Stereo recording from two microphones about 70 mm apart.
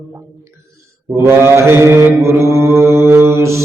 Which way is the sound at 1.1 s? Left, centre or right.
Right.